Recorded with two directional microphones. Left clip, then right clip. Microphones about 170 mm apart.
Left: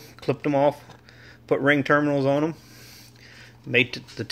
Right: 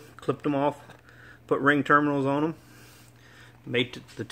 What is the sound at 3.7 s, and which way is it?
Speech, 5° left (ahead or behind).